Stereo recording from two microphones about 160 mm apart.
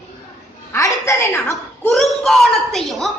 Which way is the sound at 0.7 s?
15° left (ahead or behind).